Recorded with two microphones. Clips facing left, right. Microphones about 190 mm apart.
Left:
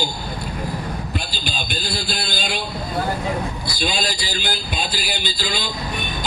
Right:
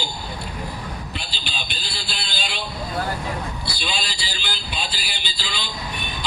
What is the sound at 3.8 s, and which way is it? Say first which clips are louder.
Speech: left 6 dB; 45° left (ahead or behind).